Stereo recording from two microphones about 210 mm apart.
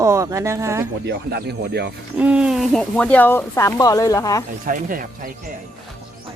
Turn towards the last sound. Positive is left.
turn(degrees=-40)  # may be behind; listen again after turning